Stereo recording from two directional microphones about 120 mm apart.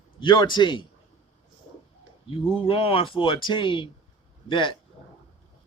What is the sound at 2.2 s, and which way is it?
A man's voice, 50° left (ahead or behind).